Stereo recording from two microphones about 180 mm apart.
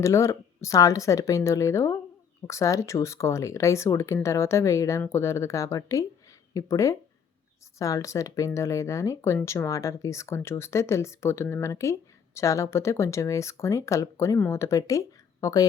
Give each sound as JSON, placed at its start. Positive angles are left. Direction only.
{"t": 0.0, "sound": "speech", "side_deg": 15}